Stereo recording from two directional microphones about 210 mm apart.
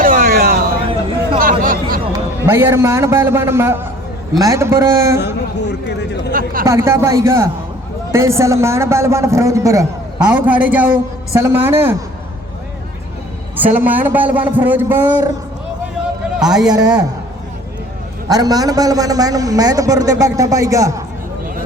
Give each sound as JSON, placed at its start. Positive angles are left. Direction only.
{"t": 0.0, "sound": "a sound", "side_deg": -40}
{"t": 0.9, "sound": "a sound", "side_deg": -25}
{"t": 1.4, "sound": "chatter", "side_deg": -40}
{"t": 2.1, "sound": "a man's voice", "side_deg": -10}
{"t": 5.2, "sound": "a man's voice", "side_deg": 55}
{"t": 6.3, "sound": "speech", "side_deg": -40}
{"t": 6.7, "sound": "a man's voice", "side_deg": -15}
{"t": 13.7, "sound": "a man's voice", "side_deg": -10}
{"t": 16.4, "sound": "a man's voice", "side_deg": -5}
{"t": 16.7, "sound": "a man's voice", "side_deg": -15}
{"t": 18.3, "sound": "a man's voice", "side_deg": -15}